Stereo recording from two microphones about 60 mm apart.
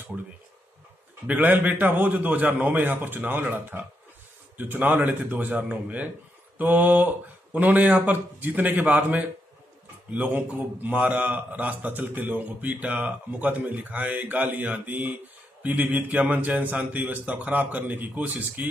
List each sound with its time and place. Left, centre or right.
1.2 s a man's voice: right
10.2 s a man's voice: right